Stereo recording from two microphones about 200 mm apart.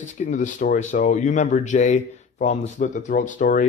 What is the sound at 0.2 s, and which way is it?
A man's voice, 40° left (ahead or behind).